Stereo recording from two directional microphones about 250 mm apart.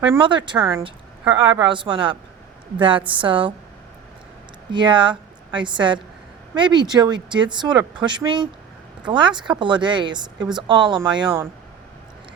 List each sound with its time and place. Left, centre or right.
0.1 s speech: centre
4.7 s a woman's voice: centre